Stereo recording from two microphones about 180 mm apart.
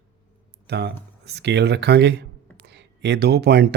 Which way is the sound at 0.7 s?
70° right (ahead or behind).